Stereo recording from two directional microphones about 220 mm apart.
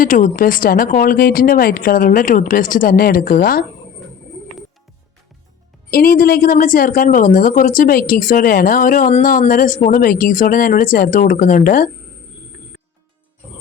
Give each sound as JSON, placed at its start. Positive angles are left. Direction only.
{"t": 0.0, "sound": "speech", "side_deg": 40}
{"t": 5.9, "sound": "speech", "side_deg": 40}